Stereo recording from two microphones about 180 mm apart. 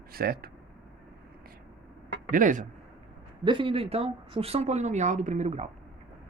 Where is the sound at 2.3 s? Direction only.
45° right (ahead or behind).